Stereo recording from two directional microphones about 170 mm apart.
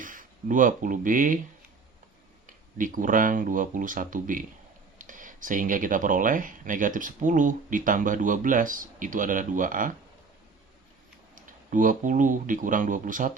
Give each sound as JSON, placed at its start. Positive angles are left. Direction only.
{"t": 0.0, "sound": "speech", "side_deg": -50}
{"t": 2.7, "sound": "speech", "side_deg": -50}
{"t": 11.3, "sound": "speech", "side_deg": -50}